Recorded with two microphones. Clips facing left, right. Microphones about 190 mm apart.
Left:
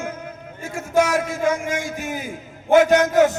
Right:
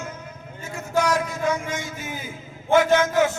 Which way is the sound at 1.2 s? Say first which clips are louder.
Left 3 dB; 50° left (ahead or behind).